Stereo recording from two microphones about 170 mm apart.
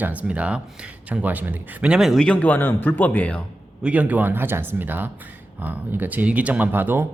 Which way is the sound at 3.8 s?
10° right (ahead or behind).